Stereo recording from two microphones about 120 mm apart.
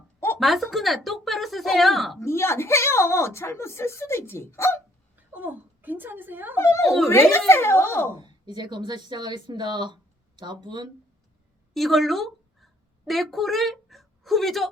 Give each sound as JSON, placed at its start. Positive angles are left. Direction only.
{"t": 0.3, "sound": "a woman's voice", "side_deg": 0}
{"t": 2.1, "sound": "speech", "side_deg": 20}
{"t": 5.1, "sound": "a woman's voice", "side_deg": -15}
{"t": 6.6, "sound": "speech", "side_deg": 20}
{"t": 8.2, "sound": "speech", "side_deg": -35}
{"t": 11.7, "sound": "a sound", "side_deg": 0}